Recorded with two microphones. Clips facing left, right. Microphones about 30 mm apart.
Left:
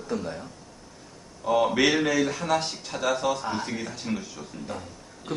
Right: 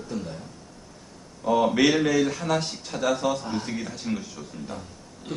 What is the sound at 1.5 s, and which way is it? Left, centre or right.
Speech, centre.